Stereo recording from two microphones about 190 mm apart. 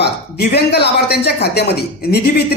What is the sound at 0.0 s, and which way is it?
A woman's voice, 60° left (ahead or behind).